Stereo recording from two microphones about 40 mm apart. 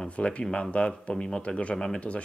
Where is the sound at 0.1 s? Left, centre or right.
Left.